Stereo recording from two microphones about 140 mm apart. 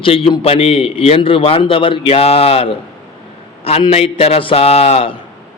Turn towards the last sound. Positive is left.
turn(degrees=45)  # may be behind; listen again after turning